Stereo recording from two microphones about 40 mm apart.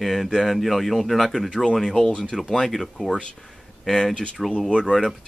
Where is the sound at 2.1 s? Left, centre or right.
Left; by 4.5 s centre.